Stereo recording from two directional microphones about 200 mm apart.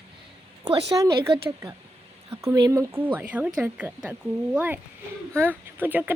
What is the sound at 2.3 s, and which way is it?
Speech, 15° right (ahead or behind).